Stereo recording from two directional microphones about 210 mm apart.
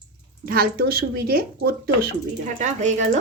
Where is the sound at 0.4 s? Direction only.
45° right (ahead or behind).